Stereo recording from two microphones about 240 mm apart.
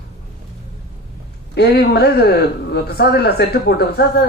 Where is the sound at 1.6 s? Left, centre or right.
Left.